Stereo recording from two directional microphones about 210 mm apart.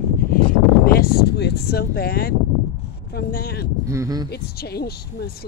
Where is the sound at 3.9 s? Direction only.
15° right (ahead or behind).